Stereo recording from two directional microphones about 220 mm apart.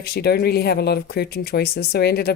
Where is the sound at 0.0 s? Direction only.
45° left (ahead or behind).